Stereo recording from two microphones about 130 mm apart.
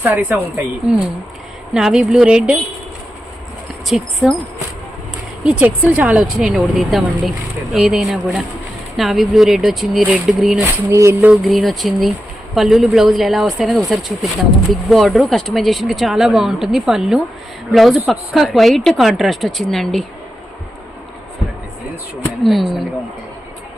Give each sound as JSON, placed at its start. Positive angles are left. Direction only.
{"t": 0.0, "sound": "a woman's voice", "side_deg": -10}
{"t": 3.8, "sound": "a woman's voice", "side_deg": -5}
{"t": 10.8, "sound": "speech", "side_deg": -20}
{"t": 11.3, "sound": "a woman's voice", "side_deg": 0}
{"t": 22.4, "sound": "a woman's voice", "side_deg": 0}